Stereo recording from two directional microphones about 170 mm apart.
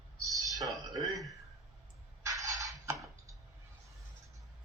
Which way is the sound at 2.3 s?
20° right (ahead or behind).